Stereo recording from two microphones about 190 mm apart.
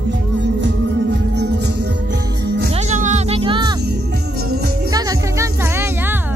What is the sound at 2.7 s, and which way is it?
Music, 40° right (ahead or behind).